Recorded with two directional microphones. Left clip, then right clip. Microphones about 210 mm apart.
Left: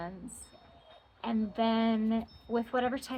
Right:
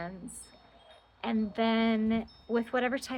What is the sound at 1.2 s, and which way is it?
A woman's voice, 50° right (ahead or behind).